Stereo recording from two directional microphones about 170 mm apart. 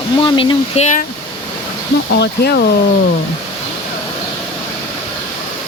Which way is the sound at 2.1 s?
75° left (ahead or behind).